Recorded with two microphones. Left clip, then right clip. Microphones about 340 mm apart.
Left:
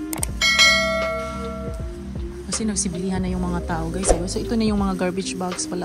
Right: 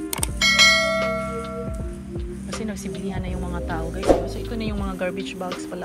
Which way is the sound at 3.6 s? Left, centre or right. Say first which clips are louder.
Right 3 dB; centre.